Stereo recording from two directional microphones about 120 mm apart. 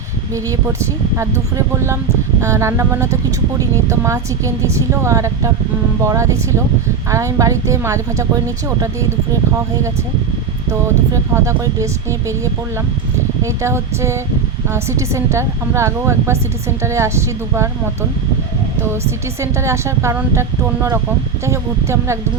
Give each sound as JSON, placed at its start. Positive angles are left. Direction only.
{"t": 0.8, "sound": "a woman's voice", "side_deg": -25}
{"t": 10.7, "sound": "a woman's voice", "side_deg": -25}
{"t": 13.4, "sound": "a woman's voice", "side_deg": -25}
{"t": 19.4, "sound": "a woman's voice", "side_deg": -25}
{"t": 21.4, "sound": "a woman's voice", "side_deg": -25}